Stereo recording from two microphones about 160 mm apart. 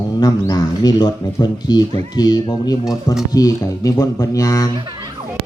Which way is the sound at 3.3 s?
20° left (ahead or behind).